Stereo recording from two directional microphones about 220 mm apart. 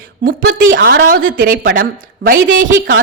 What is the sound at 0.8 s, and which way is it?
A woman's voice, 40° right (ahead or behind).